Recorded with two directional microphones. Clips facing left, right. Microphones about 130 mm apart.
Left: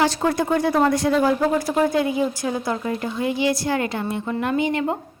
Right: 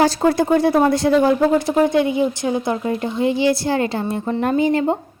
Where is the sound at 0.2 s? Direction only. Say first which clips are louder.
Right 5 dB; 30° right (ahead or behind).